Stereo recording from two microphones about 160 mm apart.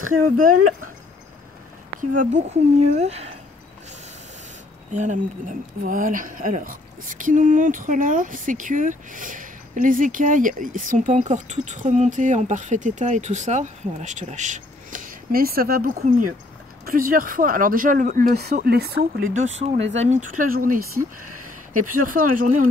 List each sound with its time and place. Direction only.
2.0 s speech: 50° right (ahead or behind)
4.9 s speech: 50° right (ahead or behind); by 19.2 s 80° right
19.4 s speech: 45° right (ahead or behind)